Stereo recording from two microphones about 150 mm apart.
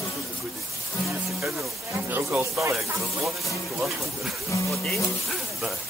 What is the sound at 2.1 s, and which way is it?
Speech, 15° right (ahead or behind).